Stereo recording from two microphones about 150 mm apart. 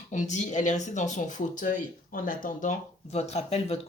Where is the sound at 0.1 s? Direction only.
55° left (ahead or behind).